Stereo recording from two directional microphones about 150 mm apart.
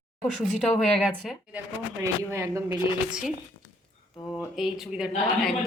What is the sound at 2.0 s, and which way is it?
Speech, 20° right (ahead or behind).